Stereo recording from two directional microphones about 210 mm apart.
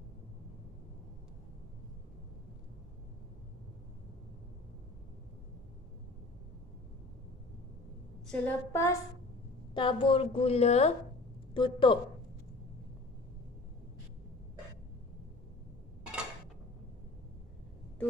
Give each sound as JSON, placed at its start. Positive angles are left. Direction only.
{"t": 8.3, "sound": "a woman's voice", "side_deg": 10}
{"t": 9.8, "sound": "a woman's voice", "side_deg": 25}